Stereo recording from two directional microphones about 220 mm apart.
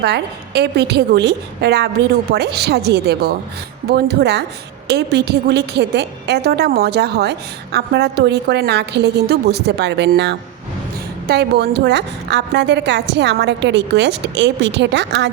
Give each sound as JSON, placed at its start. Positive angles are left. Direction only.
{"t": 0.0, "sound": "a woman's voice", "side_deg": -50}